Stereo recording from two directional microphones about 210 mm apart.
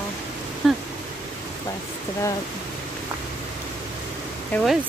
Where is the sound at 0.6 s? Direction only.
Centre (ahead or behind).